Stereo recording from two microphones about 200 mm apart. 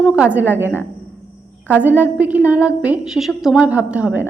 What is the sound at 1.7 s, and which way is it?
A woman's voice, 10° right (ahead or behind).